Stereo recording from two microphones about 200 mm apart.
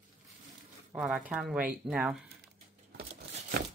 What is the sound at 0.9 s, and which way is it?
A woman's voice, 5° right (ahead or behind).